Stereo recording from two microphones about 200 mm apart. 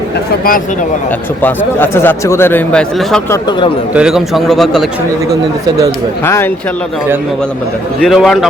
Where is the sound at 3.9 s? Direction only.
5° right (ahead or behind).